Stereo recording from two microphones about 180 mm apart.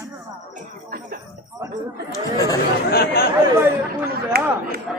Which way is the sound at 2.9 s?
60° left (ahead or behind).